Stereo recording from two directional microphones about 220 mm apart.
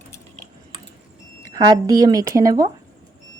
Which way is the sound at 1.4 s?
15° right (ahead or behind).